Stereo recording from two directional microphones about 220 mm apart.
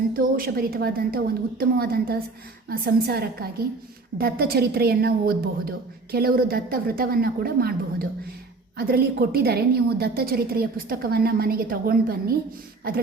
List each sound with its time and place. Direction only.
0.1 s a woman's voice: 40° right (ahead or behind)